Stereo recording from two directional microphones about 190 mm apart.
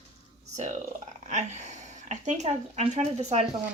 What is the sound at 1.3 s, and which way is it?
Speech, 40° right (ahead or behind).